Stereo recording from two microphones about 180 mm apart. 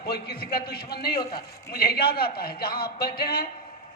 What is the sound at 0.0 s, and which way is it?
A man's voice, 60° left (ahead or behind).